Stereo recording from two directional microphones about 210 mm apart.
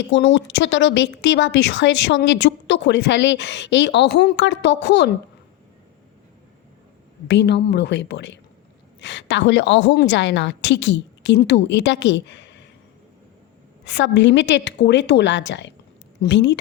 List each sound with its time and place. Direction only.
0.1 s speech: 60° left (ahead or behind)
7.3 s speech: 55° left (ahead or behind)
13.8 s speech: 55° left (ahead or behind)